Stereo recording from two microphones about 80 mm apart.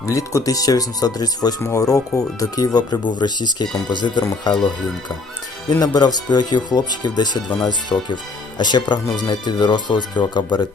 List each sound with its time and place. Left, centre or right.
0.0 s speech: left
1.6 s speech: left
5.6 s speech: left